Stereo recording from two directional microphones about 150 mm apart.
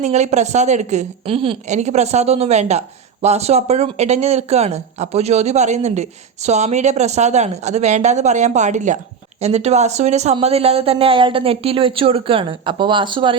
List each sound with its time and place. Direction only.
0.0 s speech: 50° right (ahead or behind)
1.6 s speech: 50° right (ahead or behind); by 13.3 s 30° right (ahead or behind)